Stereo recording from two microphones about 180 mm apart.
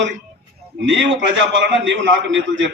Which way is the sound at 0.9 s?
90° right.